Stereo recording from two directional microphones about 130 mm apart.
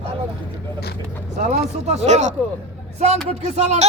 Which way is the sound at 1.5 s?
55° right (ahead or behind).